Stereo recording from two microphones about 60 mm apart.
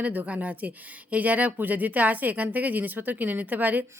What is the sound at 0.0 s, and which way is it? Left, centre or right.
A woman's voice, right.